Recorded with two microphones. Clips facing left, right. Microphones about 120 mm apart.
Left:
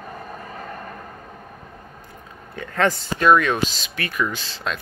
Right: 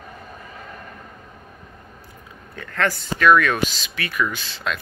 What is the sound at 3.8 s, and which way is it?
Speech, 40° left (ahead or behind).